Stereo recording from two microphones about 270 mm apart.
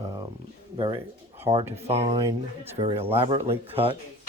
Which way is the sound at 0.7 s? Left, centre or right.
Centre.